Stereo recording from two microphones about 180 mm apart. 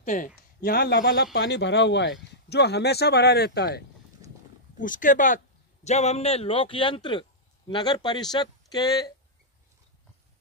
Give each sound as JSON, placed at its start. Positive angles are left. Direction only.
{"t": 0.0, "sound": "speech", "side_deg": 45}
{"t": 0.6, "sound": "speech", "side_deg": 60}
{"t": 4.2, "sound": "wild animals", "side_deg": -20}
{"t": 4.7, "sound": "speech", "side_deg": 45}